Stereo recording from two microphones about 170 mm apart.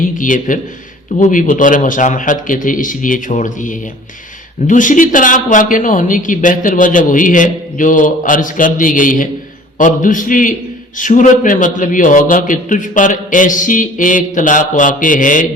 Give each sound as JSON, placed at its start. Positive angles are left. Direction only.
{"t": 0.2, "sound": "a man's voice", "side_deg": 50}